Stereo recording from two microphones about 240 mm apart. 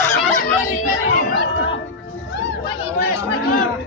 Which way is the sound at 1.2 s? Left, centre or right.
Left.